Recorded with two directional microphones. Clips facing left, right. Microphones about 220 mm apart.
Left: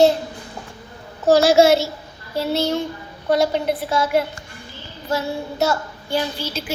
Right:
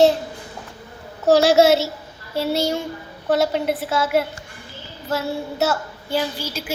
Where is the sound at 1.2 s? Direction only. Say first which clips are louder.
Left 1 dB; centre (ahead or behind).